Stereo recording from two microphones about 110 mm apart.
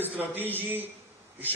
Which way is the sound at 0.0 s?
15° right (ahead or behind).